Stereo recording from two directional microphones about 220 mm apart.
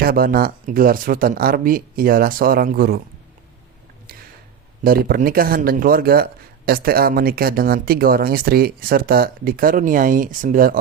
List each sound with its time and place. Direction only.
0.0 s speech: 40° right (ahead or behind)
4.8 s speech: 40° right (ahead or behind)